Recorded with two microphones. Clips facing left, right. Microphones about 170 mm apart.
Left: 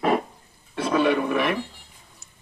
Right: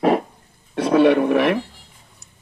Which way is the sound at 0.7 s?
70° right (ahead or behind).